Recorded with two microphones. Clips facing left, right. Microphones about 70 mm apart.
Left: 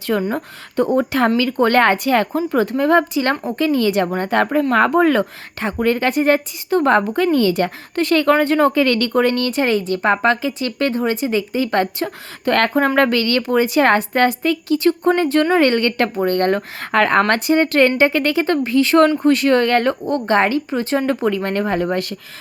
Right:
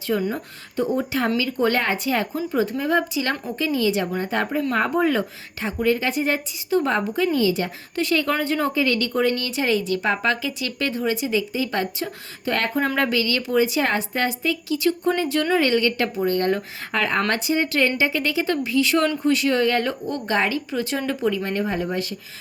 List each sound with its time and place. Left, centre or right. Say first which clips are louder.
0.2 s a woman's voice: left 4 dB; left
19.2 s a woman's voice: left 5 dB; left
21.2 s speech: left 4 dB; left